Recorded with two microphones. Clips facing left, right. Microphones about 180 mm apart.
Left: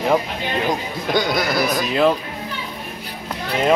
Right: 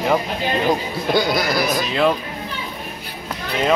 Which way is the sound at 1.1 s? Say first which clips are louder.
Right 1 dB; 5° right (ahead or behind).